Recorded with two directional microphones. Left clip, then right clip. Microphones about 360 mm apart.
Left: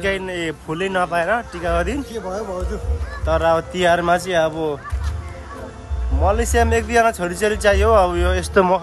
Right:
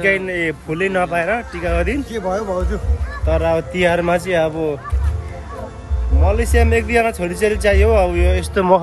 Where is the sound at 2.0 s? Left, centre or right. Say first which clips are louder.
Right 5 dB; centre.